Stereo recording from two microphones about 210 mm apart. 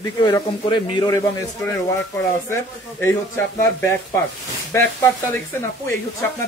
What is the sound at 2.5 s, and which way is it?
Speech, 10° left (ahead or behind).